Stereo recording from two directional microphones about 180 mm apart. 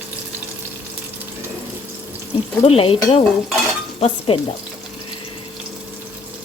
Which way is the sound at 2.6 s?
30° left (ahead or behind).